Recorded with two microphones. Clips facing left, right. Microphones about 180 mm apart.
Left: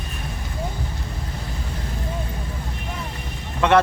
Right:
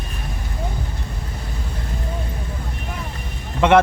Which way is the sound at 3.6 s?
20° right (ahead or behind).